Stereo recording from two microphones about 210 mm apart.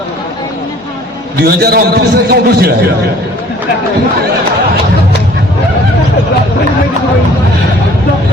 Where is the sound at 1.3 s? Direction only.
45° right (ahead or behind).